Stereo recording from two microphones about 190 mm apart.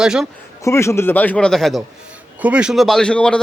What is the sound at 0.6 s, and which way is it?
A man's voice, 15° left (ahead or behind).